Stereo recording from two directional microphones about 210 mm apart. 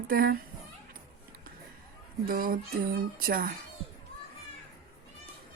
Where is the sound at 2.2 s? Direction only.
40° right (ahead or behind).